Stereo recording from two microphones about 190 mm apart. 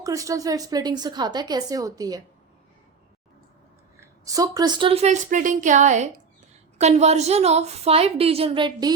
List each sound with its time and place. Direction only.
0.0 s a woman's voice: 15° right (ahead or behind)
4.3 s a woman's voice: 20° right (ahead or behind)